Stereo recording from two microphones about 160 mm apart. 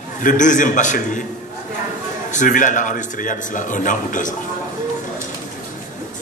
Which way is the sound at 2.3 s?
55° left (ahead or behind).